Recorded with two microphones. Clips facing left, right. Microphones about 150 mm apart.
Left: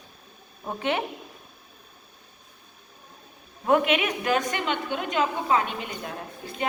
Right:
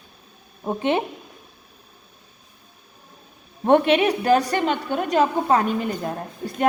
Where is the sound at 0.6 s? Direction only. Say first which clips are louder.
Right 5 dB; 20° right (ahead or behind).